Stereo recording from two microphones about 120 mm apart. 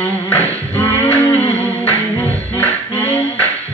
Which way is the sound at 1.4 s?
15° left (ahead or behind).